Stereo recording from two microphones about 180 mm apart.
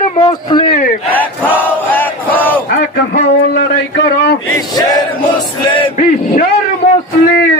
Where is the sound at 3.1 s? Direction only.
65° left (ahead or behind).